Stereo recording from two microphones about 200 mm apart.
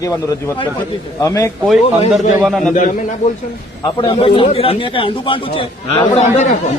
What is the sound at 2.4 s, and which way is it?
Speech, centre (ahead or behind).